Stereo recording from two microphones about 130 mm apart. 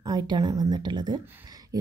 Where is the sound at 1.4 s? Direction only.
25° right (ahead or behind).